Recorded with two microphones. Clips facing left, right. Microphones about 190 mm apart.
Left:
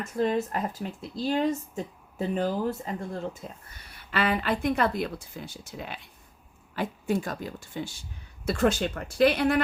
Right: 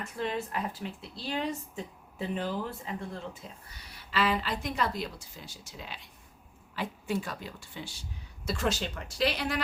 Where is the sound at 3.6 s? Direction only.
55° left (ahead or behind).